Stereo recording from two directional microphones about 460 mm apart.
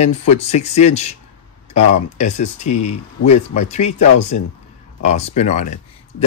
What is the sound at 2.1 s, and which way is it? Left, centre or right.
Speech, centre.